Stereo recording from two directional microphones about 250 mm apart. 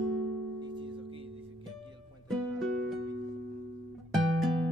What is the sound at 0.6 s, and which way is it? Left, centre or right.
Music, centre.